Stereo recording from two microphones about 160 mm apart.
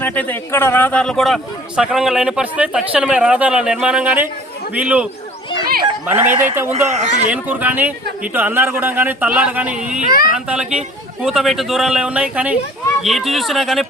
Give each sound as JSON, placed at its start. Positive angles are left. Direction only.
{"t": 0.0, "sound": "a man's voice", "side_deg": 10}
{"t": 6.1, "sound": "speech", "side_deg": -15}
{"t": 6.7, "sound": "speech", "side_deg": -45}
{"t": 7.3, "sound": "a man's voice", "side_deg": -10}